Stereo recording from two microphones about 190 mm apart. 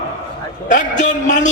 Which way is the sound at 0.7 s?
40° left (ahead or behind).